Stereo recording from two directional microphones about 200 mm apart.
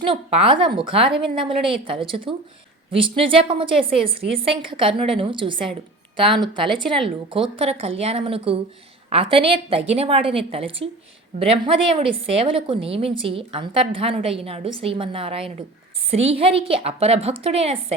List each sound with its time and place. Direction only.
0.0 s a woman's voice: 25° right (ahead or behind)